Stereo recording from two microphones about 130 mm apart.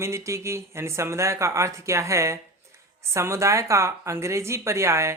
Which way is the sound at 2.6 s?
20° right (ahead or behind).